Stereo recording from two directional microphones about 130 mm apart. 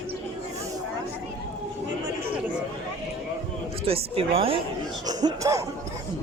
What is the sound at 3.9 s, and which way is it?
Speech, 45° right (ahead or behind).